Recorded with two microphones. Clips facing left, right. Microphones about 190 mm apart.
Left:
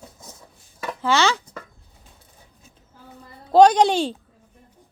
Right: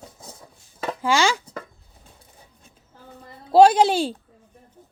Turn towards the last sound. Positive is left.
turn(degrees=-5)  # may be behind; listen again after turning